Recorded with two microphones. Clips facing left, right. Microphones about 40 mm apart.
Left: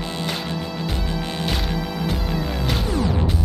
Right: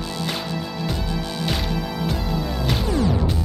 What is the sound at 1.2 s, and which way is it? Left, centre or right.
Music, left.